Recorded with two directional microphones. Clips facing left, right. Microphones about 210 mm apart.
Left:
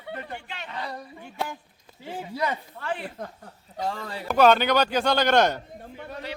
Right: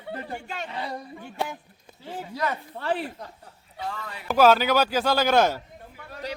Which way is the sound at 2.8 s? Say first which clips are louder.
Right 4 dB; 35° right (ahead or behind).